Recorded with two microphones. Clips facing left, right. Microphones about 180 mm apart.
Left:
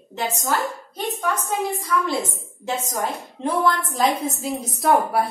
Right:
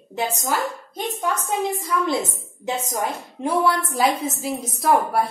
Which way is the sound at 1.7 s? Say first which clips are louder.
Right 1 dB; 20° right (ahead or behind).